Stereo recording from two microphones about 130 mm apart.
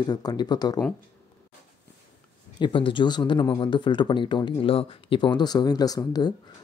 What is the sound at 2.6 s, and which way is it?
A man's voice, 40° left (ahead or behind).